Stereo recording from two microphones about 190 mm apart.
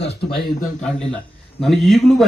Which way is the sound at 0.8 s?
5° left (ahead or behind).